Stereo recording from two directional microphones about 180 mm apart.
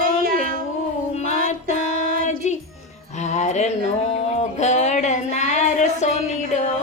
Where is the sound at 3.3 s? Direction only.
40° left (ahead or behind).